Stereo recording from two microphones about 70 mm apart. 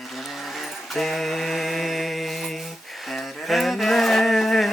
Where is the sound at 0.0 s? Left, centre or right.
Centre.